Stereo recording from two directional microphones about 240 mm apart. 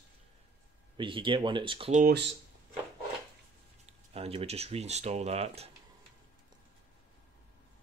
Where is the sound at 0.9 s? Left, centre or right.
Right.